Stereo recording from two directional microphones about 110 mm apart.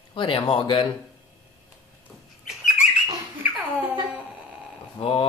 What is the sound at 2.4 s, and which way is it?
Squeak, 5° right (ahead or behind).